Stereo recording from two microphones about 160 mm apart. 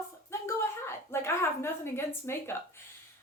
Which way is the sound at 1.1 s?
15° left (ahead or behind).